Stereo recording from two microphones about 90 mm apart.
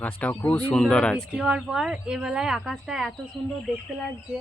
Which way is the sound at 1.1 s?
5° right (ahead or behind).